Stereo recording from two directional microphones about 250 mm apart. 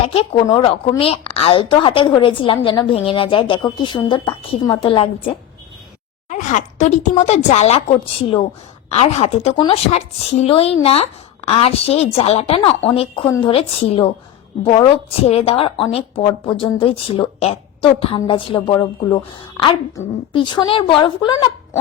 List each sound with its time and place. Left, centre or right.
0.0 s a woman's voice: left
6.2 s a woman's voice: left